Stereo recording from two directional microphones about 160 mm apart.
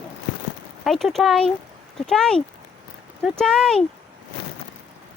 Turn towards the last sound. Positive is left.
turn(degrees=5)  # may be behind; listen again after turning